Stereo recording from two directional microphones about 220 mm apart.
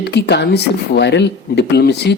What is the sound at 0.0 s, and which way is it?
Speech, 50° left (ahead or behind).